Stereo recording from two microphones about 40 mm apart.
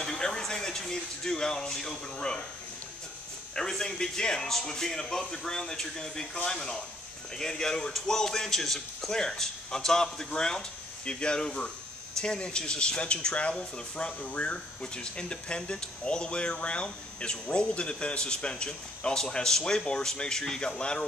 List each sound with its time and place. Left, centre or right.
0.0 s speech: centre
2.1 s speech: left
3.5 s speech: centre
9.1 s speech: centre